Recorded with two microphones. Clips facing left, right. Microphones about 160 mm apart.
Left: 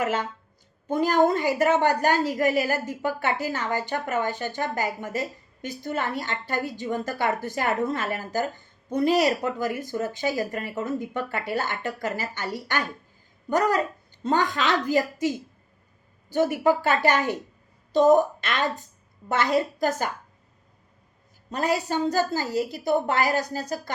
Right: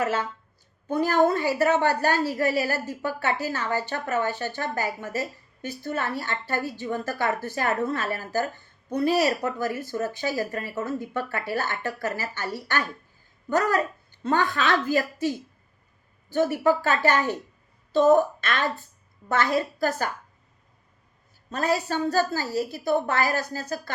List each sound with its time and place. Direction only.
0.0 s a woman's voice: 15° left (ahead or behind)
21.5 s a woman's voice: 15° left (ahead or behind)